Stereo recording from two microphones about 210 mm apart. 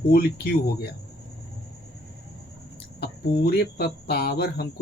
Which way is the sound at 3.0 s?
50° left (ahead or behind).